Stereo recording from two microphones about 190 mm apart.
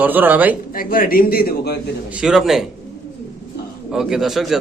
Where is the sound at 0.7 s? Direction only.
50° left (ahead or behind).